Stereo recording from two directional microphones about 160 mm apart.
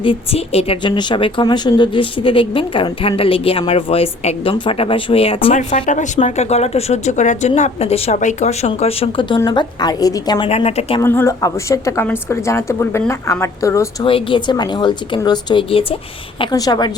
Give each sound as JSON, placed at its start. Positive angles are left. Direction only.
{"t": 0.0, "sound": "a woman's voice", "side_deg": 35}
{"t": 5.8, "sound": "a woman's voice", "side_deg": 50}
{"t": 10.5, "sound": "a woman's voice", "side_deg": 40}
{"t": 11.0, "sound": "a woman's voice", "side_deg": 15}
{"t": 14.0, "sound": "a woman's voice", "side_deg": 35}
{"t": 16.4, "sound": "a woman's voice", "side_deg": 25}